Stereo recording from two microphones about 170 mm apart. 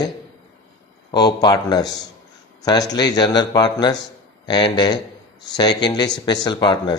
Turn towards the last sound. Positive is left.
turn(degrees=25)  # may be behind; listen again after turning